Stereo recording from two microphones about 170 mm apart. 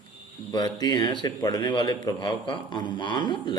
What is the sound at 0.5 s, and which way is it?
A man's voice, 25° left (ahead or behind).